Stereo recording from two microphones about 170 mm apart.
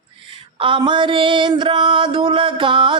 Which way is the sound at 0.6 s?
30° right (ahead or behind).